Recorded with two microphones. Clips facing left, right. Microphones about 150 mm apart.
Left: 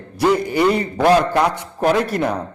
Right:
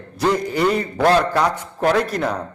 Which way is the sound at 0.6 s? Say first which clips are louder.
Left 2 dB; 10° left (ahead or behind).